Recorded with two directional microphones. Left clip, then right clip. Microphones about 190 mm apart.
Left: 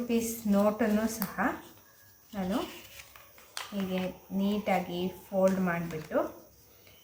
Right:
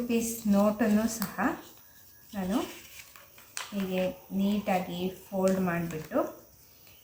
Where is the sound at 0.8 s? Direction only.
5° left (ahead or behind).